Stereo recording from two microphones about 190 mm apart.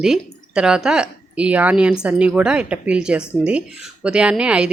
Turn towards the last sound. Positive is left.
turn(degrees=-5)  # may be behind; listen again after turning